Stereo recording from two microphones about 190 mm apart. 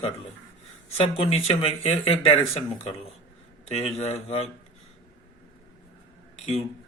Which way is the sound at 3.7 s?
30° left (ahead or behind).